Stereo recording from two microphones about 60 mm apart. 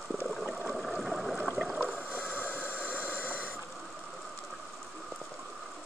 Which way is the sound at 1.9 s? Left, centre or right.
Left.